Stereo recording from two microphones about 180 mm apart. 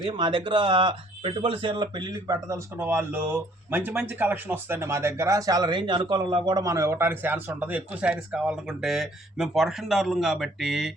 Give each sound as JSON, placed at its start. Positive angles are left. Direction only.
{"t": 0.0, "sound": "speech", "side_deg": -25}